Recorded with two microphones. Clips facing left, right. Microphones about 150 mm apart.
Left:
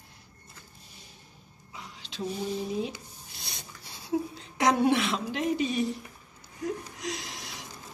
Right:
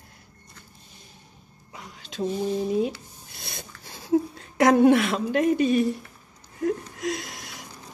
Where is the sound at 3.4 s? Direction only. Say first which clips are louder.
Right 5 dB; 55° right (ahead or behind).